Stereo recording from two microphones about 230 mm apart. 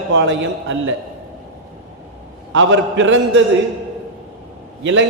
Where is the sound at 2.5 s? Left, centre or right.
Right.